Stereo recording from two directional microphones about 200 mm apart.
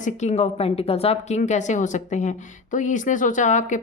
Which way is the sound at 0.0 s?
35° left (ahead or behind).